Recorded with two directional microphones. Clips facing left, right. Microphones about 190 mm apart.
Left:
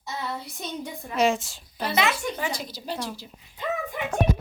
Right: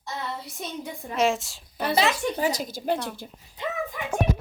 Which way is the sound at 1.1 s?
Centre (ahead or behind).